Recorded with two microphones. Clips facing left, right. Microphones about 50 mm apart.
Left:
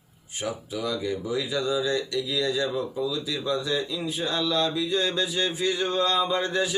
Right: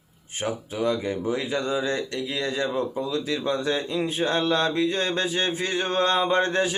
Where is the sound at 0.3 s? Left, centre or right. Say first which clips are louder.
Right 3 dB; right.